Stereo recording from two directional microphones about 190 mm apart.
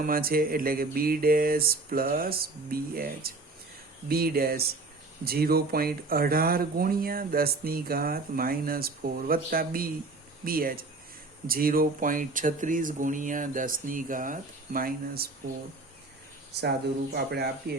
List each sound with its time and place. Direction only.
0.0 s speech: 50° right (ahead or behind)
17.2 s speech: 60° right (ahead or behind)